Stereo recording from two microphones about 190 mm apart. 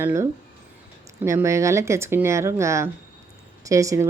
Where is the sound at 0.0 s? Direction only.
15° right (ahead or behind).